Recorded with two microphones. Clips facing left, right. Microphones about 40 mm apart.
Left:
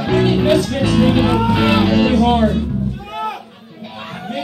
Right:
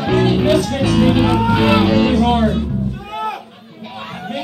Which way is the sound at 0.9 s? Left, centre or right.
Centre.